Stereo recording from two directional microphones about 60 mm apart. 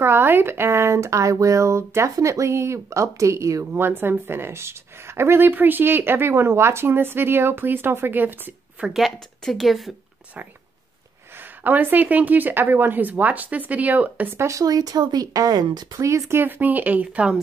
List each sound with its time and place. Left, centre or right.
0.0 s speech: right
3.7 s a woman's voice: right
9.4 s speech: centre
11.6 s speech: right
14.3 s speech: right
14.6 s speech: right
16.3 s speech: right